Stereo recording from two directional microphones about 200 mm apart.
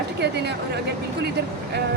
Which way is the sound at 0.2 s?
55° right (ahead or behind).